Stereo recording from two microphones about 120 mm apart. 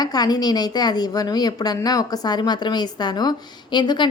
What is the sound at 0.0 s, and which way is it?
A woman's voice, 35° left (ahead or behind).